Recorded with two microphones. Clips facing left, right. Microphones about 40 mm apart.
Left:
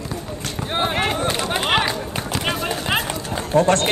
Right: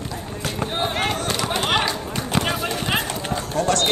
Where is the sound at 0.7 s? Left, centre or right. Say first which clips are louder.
Left 4 dB; left.